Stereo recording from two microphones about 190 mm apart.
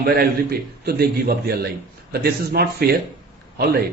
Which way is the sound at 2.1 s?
55° right (ahead or behind).